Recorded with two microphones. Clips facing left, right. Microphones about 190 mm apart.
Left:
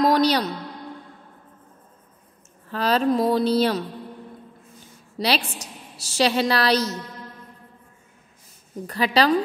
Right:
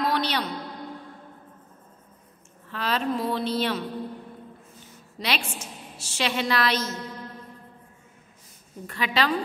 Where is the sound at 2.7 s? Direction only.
40° left (ahead or behind).